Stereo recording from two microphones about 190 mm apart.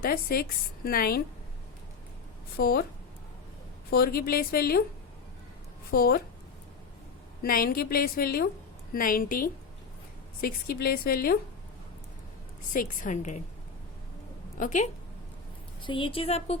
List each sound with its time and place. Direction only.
0.0 s a woman's voice: 50° left (ahead or behind)
2.6 s a woman's voice: 50° left (ahead or behind)
3.8 s a woman's voice: 55° left (ahead or behind)
5.9 s a woman's voice: 55° left (ahead or behind)
7.4 s a woman's voice: 50° left (ahead or behind)
12.7 s a woman's voice: 45° left (ahead or behind)
14.6 s a woman's voice: 40° left (ahead or behind)
15.8 s a woman's voice: 25° left (ahead or behind)